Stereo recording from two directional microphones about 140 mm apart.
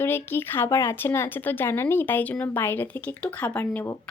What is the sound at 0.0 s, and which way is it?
Speech, 15° left (ahead or behind).